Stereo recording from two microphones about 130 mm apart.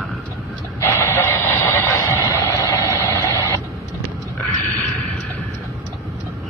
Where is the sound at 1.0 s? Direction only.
15° left (ahead or behind).